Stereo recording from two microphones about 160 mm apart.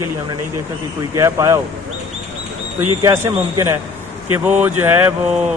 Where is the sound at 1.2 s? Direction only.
20° right (ahead or behind).